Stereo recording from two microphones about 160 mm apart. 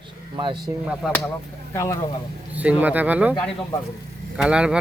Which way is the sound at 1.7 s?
20° left (ahead or behind).